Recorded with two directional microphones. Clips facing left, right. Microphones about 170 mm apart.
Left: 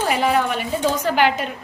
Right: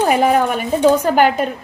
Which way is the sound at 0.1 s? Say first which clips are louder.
Right 5 dB; 45° right (ahead or behind).